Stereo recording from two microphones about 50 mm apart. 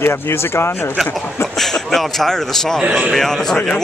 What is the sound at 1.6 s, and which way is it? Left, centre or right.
Speech, centre.